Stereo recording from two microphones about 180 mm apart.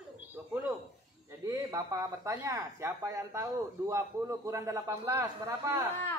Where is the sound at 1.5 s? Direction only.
20° right (ahead or behind).